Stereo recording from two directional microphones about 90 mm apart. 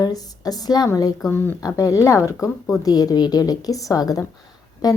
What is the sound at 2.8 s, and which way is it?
A woman's voice, 45° left (ahead or behind).